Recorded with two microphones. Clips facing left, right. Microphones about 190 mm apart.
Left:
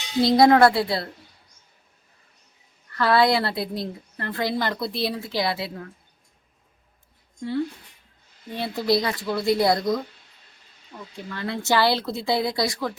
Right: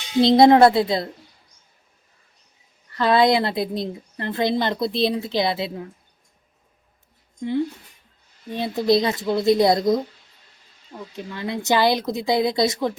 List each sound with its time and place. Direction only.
0.2 s a woman's voice: 25° right (ahead or behind)
2.9 s a woman's voice: 20° right (ahead or behind)
8.5 s a woman's voice: 20° right (ahead or behind)
11.2 s speech: 15° right (ahead or behind)